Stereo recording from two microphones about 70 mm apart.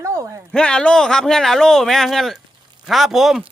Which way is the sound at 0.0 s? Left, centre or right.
Right.